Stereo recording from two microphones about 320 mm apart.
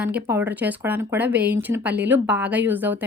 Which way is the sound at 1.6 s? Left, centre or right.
Centre.